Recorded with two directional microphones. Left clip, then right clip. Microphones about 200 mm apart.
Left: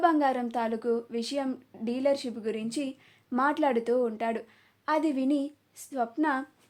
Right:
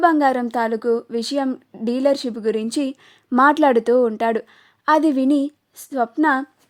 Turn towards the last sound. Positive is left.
turn(degrees=-50)  # may be behind; listen again after turning